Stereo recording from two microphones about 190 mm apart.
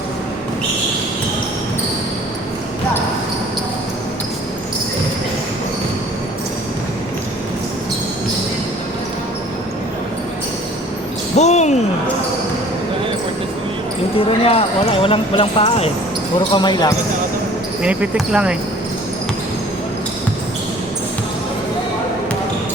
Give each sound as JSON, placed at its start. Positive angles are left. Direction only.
{"t": 11.3, "sound": "a sound", "side_deg": 35}
{"t": 14.2, "sound": "speech", "side_deg": 30}
{"t": 17.8, "sound": "speech", "side_deg": -5}